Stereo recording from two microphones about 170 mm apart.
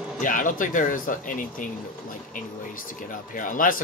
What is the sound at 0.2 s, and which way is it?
Speech, 50° left (ahead or behind).